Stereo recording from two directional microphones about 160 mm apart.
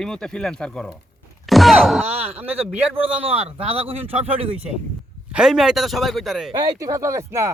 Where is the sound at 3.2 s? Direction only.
35° right (ahead or behind).